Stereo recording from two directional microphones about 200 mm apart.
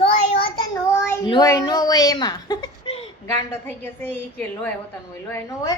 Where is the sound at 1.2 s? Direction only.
20° left (ahead or behind).